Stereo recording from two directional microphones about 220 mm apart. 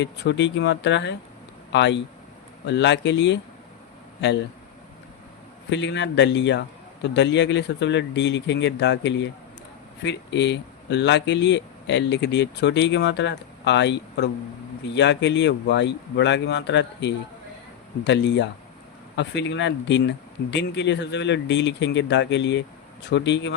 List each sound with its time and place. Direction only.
0.0 s speech: 50° left (ahead or behind)
5.7 s speech: 55° left (ahead or behind)